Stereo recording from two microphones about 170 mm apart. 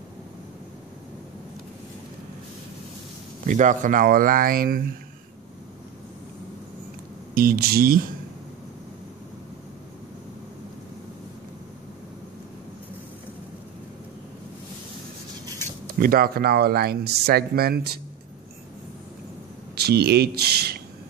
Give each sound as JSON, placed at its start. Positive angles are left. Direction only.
{"t": 3.4, "sound": "speech", "side_deg": -50}
{"t": 7.3, "sound": "speech", "side_deg": -60}
{"t": 16.0, "sound": "speech", "side_deg": -60}
{"t": 19.7, "sound": "speech", "side_deg": -70}